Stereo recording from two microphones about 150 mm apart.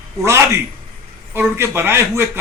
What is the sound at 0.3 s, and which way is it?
A man's voice, 20° right (ahead or behind).